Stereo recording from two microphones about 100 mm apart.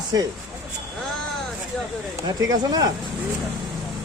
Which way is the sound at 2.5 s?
40° right (ahead or behind).